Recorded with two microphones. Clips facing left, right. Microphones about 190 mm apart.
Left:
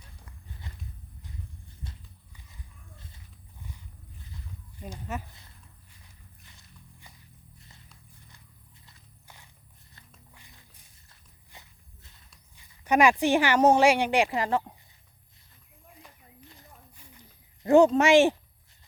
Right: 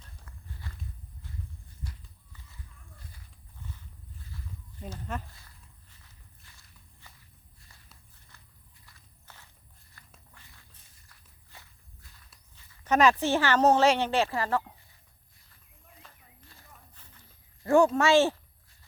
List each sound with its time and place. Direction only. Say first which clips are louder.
0.0 s walk: left 1 dB; 15° left (ahead or behind)
1.8 s clip-clop: right 1 dB; 20° left (ahead or behind)
4.8 s speech: left 1 dB; 5° left (ahead or behind)
6.4 s walk: left 5 dB; 20° left (ahead or behind)
9.2 s walk: left 1 dB; 15° left (ahead or behind)
10.3 s a sound: left 1 dB; 20° left (ahead or behind)
11.1 s walk: left 2 dB; 20° left (ahead or behind)
12.5 s speech: left 2 dB; 15° left (ahead or behind)
16.0 s a sound: left 4 dB; 15° left (ahead or behind)